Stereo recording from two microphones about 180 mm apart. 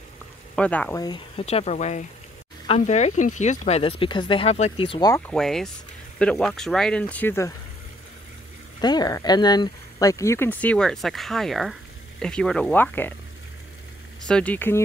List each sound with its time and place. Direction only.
0.6 s speech: 5° left (ahead or behind)
0.9 s speech: 25° left (ahead or behind)
5.1 s speech: 5° left (ahead or behind)
8.8 s speech: 20° left (ahead or behind)
14.2 s speech: 5° left (ahead or behind)